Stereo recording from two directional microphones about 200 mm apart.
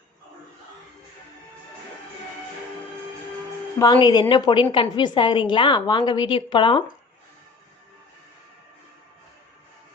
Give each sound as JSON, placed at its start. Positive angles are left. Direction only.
{"t": 3.8, "sound": "a woman's voice", "side_deg": 20}